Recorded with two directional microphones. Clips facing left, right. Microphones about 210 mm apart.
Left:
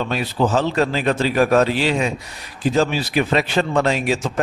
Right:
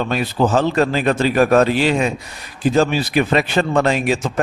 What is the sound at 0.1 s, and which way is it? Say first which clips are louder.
A man's voice: right 2 dB; 50° right (ahead or behind).